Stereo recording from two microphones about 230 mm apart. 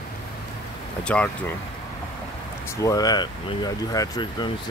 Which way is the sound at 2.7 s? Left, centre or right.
Centre.